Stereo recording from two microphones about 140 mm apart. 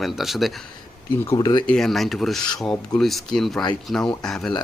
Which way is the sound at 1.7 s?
5° left (ahead or behind).